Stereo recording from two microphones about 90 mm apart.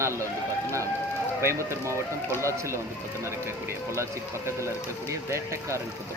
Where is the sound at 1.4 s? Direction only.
30° right (ahead or behind).